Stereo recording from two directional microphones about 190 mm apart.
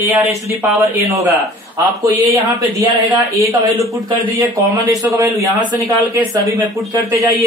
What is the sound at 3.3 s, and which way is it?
A man's voice, 15° right (ahead or behind).